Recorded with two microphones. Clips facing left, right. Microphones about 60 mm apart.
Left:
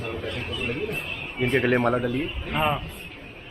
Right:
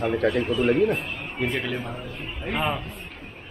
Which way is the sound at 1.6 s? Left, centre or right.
Left.